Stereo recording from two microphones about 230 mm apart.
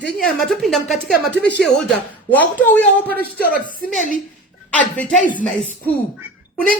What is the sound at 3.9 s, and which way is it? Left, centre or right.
Speech, left.